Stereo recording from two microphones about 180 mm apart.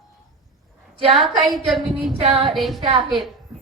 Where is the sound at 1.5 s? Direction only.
Centre (ahead or behind).